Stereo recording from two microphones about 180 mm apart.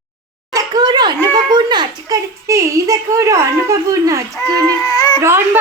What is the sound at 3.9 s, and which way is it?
Speech, 15° right (ahead or behind).